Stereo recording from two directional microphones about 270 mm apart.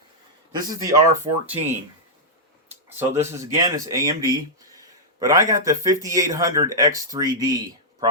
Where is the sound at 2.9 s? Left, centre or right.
Centre.